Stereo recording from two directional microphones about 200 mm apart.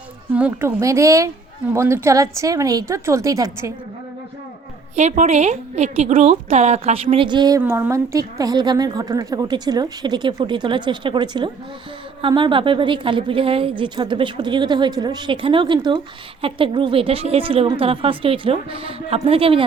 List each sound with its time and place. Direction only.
0.3 s a woman's voice: 10° right (ahead or behind)
4.9 s a woman's voice: 35° right (ahead or behind)